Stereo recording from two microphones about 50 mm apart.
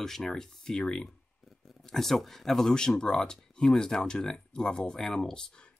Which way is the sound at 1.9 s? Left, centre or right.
Centre.